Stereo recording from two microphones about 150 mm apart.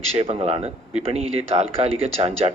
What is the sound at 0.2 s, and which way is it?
Speech, 40° right (ahead or behind).